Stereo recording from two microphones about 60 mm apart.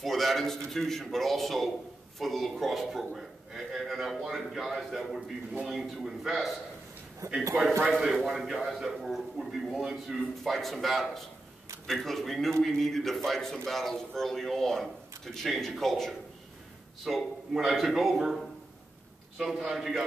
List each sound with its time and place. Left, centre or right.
0.0 s a man's voice: centre
7.2 s a man's voice: right
8.0 s a man's voice: centre